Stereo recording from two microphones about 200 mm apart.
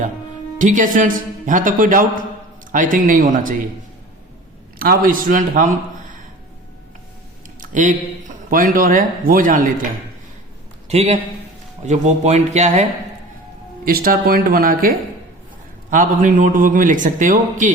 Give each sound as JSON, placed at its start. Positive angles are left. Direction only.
{"t": 0.6, "sound": "a man's voice", "side_deg": -40}
{"t": 4.8, "sound": "a man's voice", "side_deg": -45}
{"t": 7.6, "sound": "a sound", "side_deg": -40}
{"t": 8.4, "sound": "speech", "side_deg": -45}
{"t": 10.8, "sound": "a man's voice", "side_deg": -30}
{"t": 13.8, "sound": "a man's voice", "side_deg": -45}